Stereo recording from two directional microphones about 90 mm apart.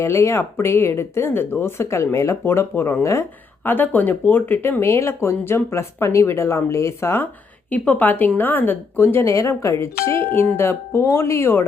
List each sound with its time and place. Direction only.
0.0 s speech: 35° left (ahead or behind)